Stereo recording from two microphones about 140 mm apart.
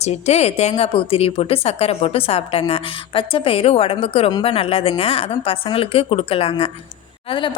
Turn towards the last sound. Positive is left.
turn(degrees=45)  # may be behind; listen again after turning